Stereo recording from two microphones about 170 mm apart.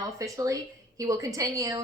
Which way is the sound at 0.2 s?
20° right (ahead or behind).